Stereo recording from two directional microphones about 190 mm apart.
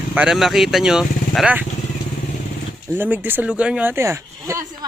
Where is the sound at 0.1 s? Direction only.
5° right (ahead or behind).